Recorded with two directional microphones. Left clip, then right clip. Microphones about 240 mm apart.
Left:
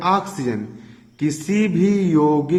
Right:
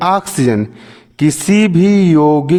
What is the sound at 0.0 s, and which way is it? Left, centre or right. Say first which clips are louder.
A man's voice: right 6 dB; right.